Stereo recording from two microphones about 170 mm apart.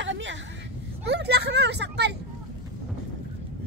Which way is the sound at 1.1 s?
75° right (ahead or behind).